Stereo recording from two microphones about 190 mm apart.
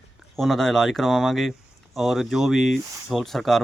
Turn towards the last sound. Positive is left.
turn(degrees=0)  # may be behind; listen again after turning